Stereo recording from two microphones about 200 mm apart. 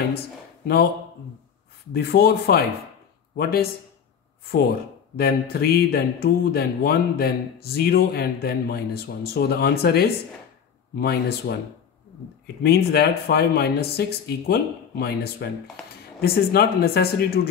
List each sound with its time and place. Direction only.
1.9 s speech: 50° left (ahead or behind)
5.1 s speech: 50° left (ahead or behind)
12.6 s speech: 50° left (ahead or behind)